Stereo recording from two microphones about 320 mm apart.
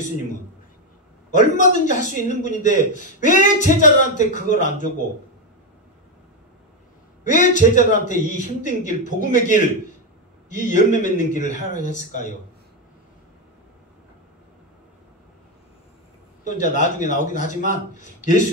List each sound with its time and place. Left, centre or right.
1.3 s a man's voice: left
7.2 s a man's voice: left
16.4 s a man's voice: left